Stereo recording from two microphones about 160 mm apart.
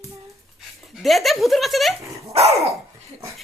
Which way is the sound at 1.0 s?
Centre (ahead or behind).